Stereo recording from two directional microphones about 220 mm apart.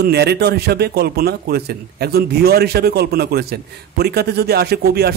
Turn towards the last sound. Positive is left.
turn(degrees=-45)  # may be behind; listen again after turning